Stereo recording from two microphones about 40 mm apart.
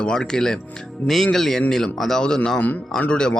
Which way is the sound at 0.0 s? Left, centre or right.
Centre.